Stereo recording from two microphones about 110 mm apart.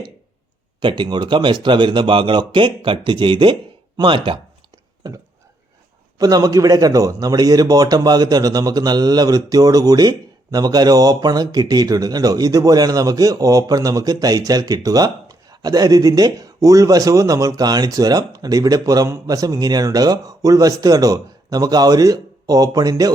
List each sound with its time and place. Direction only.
0.8 s a man's voice: 45° right (ahead or behind)
5.0 s speech: 35° right (ahead or behind)